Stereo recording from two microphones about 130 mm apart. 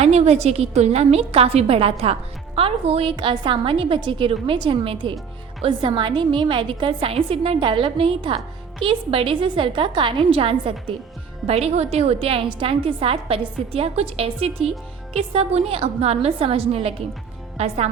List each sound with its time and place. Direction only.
0.0 s a woman's voice: 55° right (ahead or behind)